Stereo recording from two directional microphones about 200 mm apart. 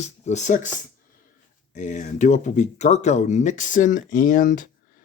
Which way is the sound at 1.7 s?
35° left (ahead or behind).